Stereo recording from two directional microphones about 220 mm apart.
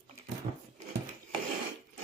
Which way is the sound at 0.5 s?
30° right (ahead or behind).